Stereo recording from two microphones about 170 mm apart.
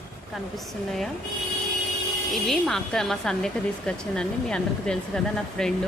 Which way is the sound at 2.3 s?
Centre (ahead or behind).